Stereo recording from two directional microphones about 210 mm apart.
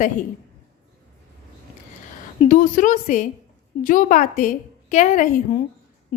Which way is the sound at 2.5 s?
40° left (ahead or behind).